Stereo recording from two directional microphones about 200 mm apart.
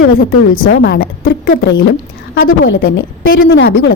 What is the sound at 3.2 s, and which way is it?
Speech, 50° left (ahead or behind).